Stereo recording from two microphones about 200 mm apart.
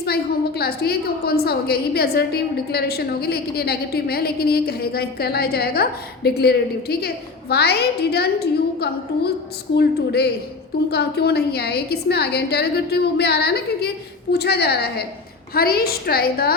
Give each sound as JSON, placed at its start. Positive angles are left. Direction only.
{"t": 0.0, "sound": "a woman's voice", "side_deg": 50}